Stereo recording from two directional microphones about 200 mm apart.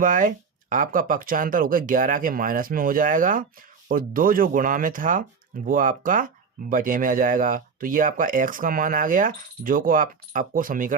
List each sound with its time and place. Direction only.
0.0 s speech: 40° right (ahead or behind)